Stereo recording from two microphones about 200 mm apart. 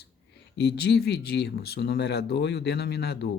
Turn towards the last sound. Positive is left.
turn(degrees=55)  # may be behind; listen again after turning